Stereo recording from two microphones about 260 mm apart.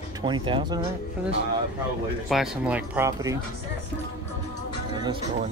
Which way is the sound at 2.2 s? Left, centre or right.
Centre.